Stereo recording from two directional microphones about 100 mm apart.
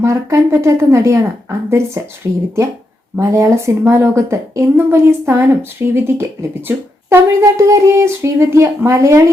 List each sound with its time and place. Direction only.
0.0 s speech: 30° right (ahead or behind)
3.2 s speech: 30° right (ahead or behind)